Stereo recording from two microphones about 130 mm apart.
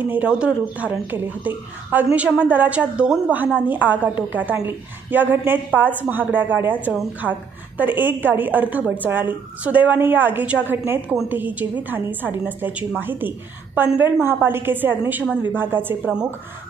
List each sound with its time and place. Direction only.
0.0 s a woman's voice: 10° right (ahead or behind)